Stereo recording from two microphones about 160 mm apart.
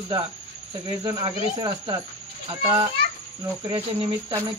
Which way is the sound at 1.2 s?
30° right (ahead or behind).